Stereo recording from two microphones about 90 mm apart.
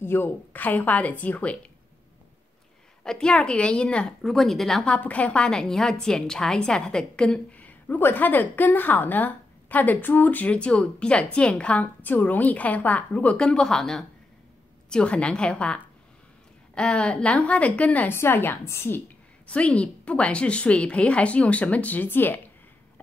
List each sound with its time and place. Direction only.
0.0 s a woman's voice: 25° left (ahead or behind)
3.0 s a woman's voice: 10° left (ahead or behind); by 18.9 s 25° left (ahead or behind)
19.4 s a woman's voice: 15° left (ahead or behind)